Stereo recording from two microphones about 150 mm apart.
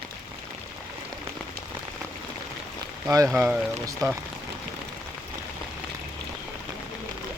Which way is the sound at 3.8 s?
20° right (ahead or behind).